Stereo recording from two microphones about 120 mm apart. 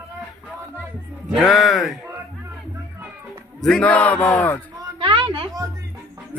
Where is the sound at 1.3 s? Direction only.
Centre (ahead or behind).